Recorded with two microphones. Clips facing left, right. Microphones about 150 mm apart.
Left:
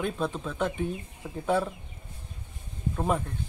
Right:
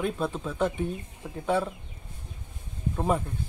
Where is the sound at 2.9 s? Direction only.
5° right (ahead or behind).